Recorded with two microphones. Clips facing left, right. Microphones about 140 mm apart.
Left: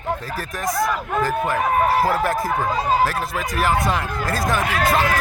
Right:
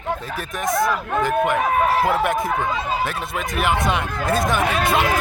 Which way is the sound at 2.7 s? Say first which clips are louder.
Left 3 dB; 40° left (ahead or behind).